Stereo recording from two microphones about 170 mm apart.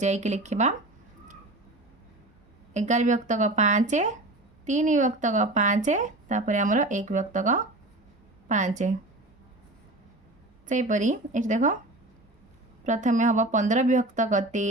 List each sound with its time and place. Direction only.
0.0 s speech: 45° right (ahead or behind)
2.7 s speech: 45° right (ahead or behind)
10.7 s speech: 45° right (ahead or behind)
12.8 s speech: 45° right (ahead or behind)